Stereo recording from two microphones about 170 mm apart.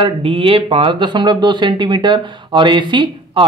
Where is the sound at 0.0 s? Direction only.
30° right (ahead or behind).